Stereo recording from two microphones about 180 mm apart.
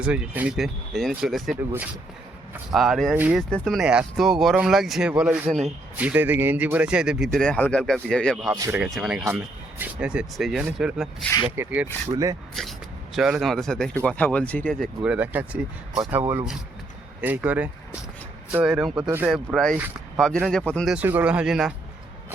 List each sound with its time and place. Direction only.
0.0 s speech: 5° right (ahead or behind)
3.5 s speech: 5° left (ahead or behind)
8.5 s speech: 20° right (ahead or behind)
8.8 s speech: 5° right (ahead or behind)
11.5 s speech: 10° right (ahead or behind)
13.1 s speech: 5° right (ahead or behind)
17.2 s speech: 10° right (ahead or behind)
19.3 s speech: centre (ahead or behind)
20.9 s speech: 10° right (ahead or behind)